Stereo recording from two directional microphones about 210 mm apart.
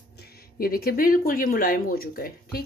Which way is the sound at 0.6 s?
45° left (ahead or behind).